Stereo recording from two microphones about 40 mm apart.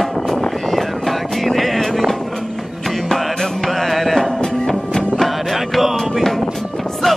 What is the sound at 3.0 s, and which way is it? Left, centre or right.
Music, centre.